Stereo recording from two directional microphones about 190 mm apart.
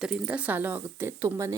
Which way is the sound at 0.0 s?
5° right (ahead or behind).